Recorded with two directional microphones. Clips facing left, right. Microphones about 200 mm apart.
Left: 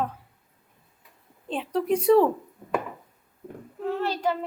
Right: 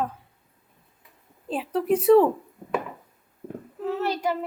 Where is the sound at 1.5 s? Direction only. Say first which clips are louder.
Right 1 dB; 5° right (ahead or behind).